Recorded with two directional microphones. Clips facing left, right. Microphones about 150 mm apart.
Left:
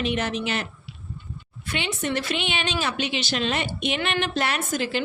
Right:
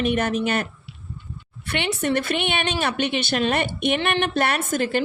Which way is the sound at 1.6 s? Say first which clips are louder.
Right 4 dB; 65° right (ahead or behind).